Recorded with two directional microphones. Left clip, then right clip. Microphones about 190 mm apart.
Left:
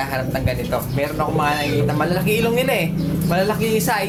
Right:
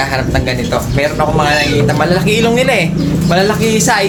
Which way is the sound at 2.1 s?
5° left (ahead or behind).